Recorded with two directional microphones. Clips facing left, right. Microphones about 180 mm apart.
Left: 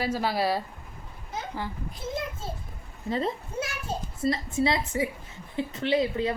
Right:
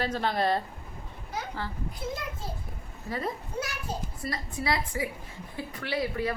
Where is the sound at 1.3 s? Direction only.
20° left (ahead or behind).